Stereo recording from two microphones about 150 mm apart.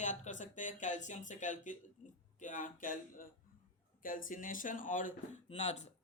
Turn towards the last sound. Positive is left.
turn(degrees=45)  # may be behind; listen again after turning